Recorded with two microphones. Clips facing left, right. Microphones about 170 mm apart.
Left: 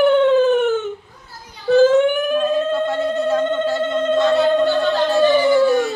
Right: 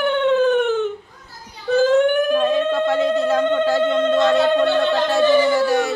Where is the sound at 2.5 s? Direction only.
90° right.